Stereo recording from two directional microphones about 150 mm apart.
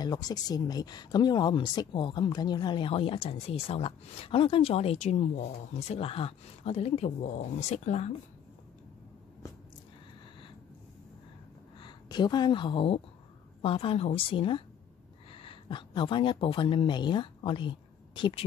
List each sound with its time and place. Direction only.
0.0 s speech: 25° left (ahead or behind); by 8.1 s 50° left (ahead or behind)
11.8 s speech: 30° left (ahead or behind)